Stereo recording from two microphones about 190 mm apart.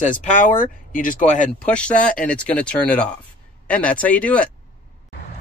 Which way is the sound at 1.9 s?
45° left (ahead or behind).